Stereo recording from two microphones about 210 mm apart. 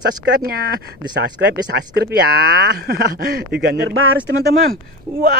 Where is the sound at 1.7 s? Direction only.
50° right (ahead or behind).